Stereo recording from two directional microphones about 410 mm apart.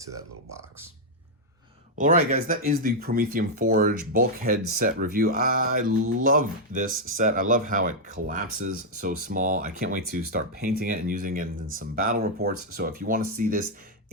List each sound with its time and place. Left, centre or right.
2.0 s speech: centre